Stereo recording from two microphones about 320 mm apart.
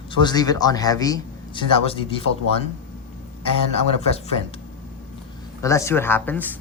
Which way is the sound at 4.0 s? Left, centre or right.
Centre.